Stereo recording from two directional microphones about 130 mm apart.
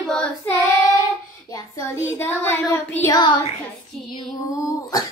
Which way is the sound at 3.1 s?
35° left (ahead or behind).